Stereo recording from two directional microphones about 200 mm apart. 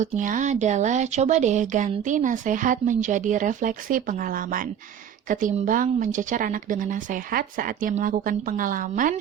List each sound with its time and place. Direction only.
0.0 s speech: 40° right (ahead or behind)